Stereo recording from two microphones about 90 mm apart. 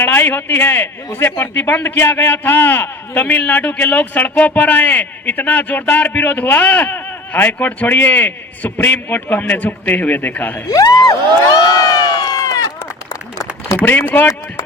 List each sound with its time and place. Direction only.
0.0 s a man's voice: 20° left (ahead or behind)
10.7 s speech: 45° left (ahead or behind)
11.7 s run: 45° left (ahead or behind)
13.8 s a man's voice: 20° left (ahead or behind)